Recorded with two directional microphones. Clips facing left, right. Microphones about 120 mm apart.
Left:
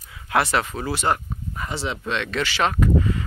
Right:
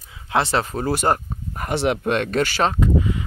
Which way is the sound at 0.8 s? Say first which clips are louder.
Right 3 dB; 45° right (ahead or behind).